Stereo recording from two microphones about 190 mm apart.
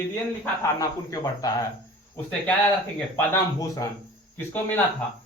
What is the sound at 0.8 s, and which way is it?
Speech, 20° left (ahead or behind).